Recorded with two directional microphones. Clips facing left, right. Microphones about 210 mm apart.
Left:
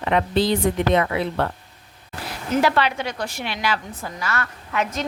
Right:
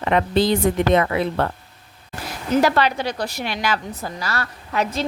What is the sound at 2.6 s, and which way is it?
A woman's voice, 40° right (ahead or behind).